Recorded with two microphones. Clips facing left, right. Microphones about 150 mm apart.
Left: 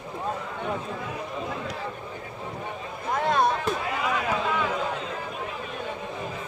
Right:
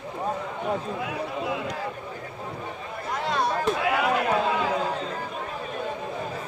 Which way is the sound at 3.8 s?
75° right (ahead or behind).